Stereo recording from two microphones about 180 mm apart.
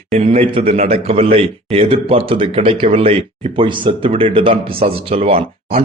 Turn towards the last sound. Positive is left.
turn(degrees=-35)  # may be behind; listen again after turning